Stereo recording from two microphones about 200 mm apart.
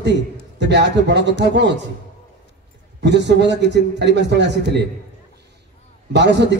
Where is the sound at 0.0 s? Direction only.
60° right (ahead or behind).